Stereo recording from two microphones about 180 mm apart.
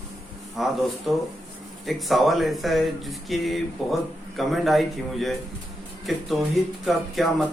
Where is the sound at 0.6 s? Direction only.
Centre (ahead or behind).